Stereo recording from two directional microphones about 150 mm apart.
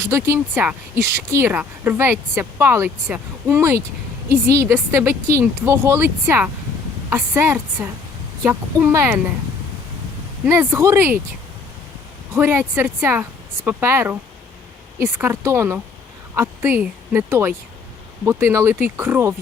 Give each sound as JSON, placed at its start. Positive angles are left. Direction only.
{"t": 0.0, "sound": "speech", "side_deg": -15}
{"t": 10.4, "sound": "speech", "side_deg": -15}
{"t": 12.3, "sound": "speech", "side_deg": -15}